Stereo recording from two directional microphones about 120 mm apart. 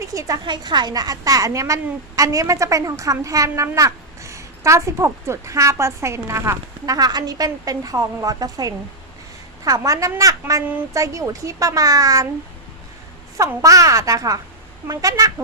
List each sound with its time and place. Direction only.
0.0 s a woman's voice: 25° right (ahead or behind)
0.4 s a woman's voice: 35° right (ahead or behind)
13.6 s a woman's voice: 30° right (ahead or behind)